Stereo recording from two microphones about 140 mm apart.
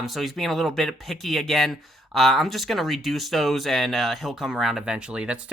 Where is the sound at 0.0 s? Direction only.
Centre (ahead or behind).